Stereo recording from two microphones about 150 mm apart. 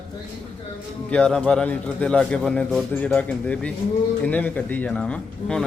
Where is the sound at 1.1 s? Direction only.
5° left (ahead or behind).